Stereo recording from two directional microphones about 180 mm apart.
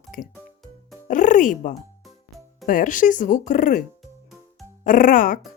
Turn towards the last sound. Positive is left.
turn(degrees=50)  # may be behind; listen again after turning